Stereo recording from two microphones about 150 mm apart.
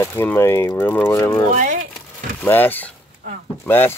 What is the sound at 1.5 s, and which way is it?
Speech, 55° right (ahead or behind).